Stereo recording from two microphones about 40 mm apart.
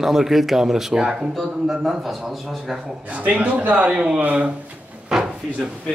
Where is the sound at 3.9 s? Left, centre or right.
Right.